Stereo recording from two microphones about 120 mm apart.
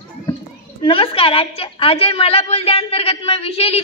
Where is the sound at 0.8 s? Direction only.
50° left (ahead or behind).